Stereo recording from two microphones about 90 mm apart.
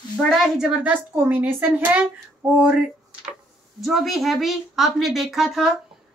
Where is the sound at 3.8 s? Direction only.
Centre (ahead or behind).